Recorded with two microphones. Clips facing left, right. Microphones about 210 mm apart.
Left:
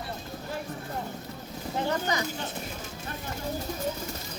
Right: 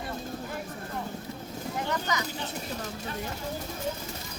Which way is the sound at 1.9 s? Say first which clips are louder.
Left 2 dB; 30° left (ahead or behind).